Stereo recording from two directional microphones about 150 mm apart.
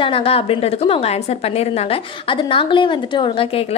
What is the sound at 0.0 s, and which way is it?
A woman's voice, 40° left (ahead or behind).